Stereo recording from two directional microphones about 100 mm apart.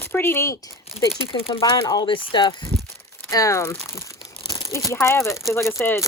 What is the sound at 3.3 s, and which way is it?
Speech, 35° left (ahead or behind).